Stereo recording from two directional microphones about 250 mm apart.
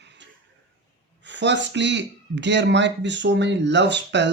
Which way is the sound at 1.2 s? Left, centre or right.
Right.